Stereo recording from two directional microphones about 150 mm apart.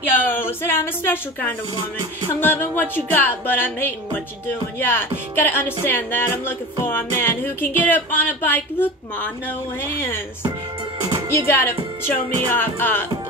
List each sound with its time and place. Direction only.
0.1 s speech: 15° left (ahead or behind)
2.4 s music: 15° left (ahead or behind)
11.0 s music: 25° right (ahead or behind)
11.3 s music: 15° left (ahead or behind)